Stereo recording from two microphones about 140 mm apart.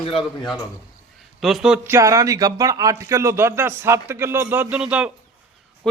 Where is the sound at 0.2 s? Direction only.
Centre (ahead or behind).